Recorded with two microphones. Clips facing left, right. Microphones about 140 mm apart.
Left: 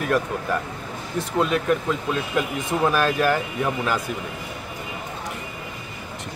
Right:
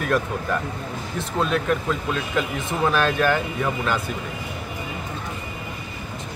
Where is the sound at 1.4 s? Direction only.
10° left (ahead or behind).